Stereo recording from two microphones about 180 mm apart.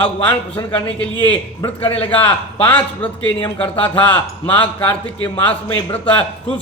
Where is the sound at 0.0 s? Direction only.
10° left (ahead or behind).